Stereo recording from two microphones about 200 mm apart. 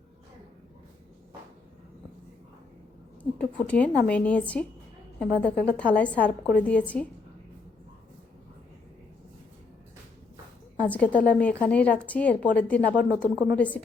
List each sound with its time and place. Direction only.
3.3 s a woman's voice: 5° left (ahead or behind)
10.8 s a woman's voice: 5° left (ahead or behind)